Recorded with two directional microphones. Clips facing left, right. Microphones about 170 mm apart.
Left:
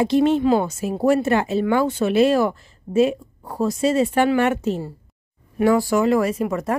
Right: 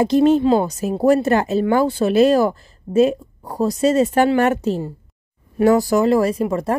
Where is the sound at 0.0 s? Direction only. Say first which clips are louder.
Right 3 dB; 40° right (ahead or behind).